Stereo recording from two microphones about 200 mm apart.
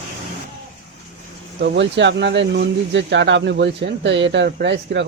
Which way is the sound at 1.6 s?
60° right (ahead or behind).